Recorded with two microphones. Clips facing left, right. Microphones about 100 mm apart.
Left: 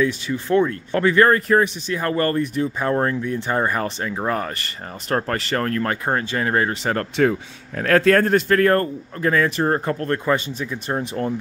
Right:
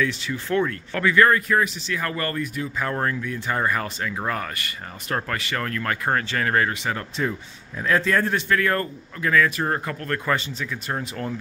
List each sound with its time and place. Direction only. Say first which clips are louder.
0.0 s speech: left 4 dB; 20° left (ahead or behind)
6.0 s speech: left 2 dB; 25° left (ahead or behind)
7.0 s speech: left 8 dB; 70° left (ahead or behind); by 11.3 s 25° left (ahead or behind)